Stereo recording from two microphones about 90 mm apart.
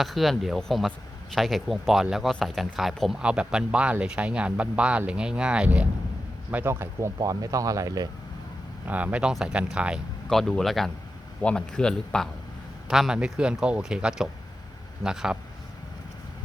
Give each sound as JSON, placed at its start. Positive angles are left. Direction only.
{"t": 0.0, "sound": "speech", "side_deg": 0}
{"t": 7.2, "sound": "speech", "side_deg": -40}
{"t": 8.9, "sound": "speech", "side_deg": -15}
{"t": 10.2, "sound": "speech", "side_deg": 5}
{"t": 12.9, "sound": "speech", "side_deg": -5}